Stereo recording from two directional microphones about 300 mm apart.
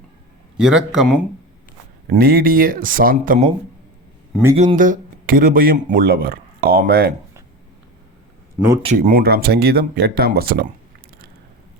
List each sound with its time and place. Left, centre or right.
0.6 s speech: centre
2.0 s speech: right
4.5 s speech: right
8.5 s speech: centre
9.0 s speech: right